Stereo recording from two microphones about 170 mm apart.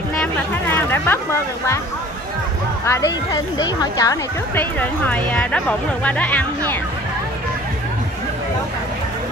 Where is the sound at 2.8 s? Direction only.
15° left (ahead or behind).